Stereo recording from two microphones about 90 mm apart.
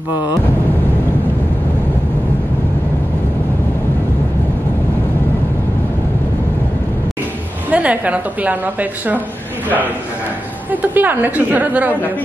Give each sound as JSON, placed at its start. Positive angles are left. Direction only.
{"t": 0.1, "sound": "vehicle", "side_deg": 50}
{"t": 7.7, "sound": "a woman's voice", "side_deg": -15}
{"t": 10.7, "sound": "a woman's voice", "side_deg": -20}